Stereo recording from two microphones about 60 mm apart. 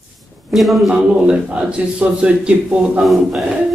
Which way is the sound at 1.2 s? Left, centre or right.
Centre.